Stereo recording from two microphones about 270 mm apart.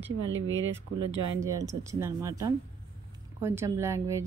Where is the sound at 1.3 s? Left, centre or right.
Centre.